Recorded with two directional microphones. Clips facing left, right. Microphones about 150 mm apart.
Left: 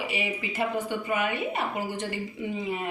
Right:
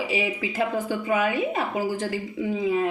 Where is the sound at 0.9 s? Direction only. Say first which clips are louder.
Right 4 dB; 90° right.